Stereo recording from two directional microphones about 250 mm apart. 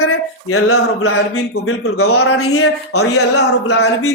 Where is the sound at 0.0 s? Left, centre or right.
Left.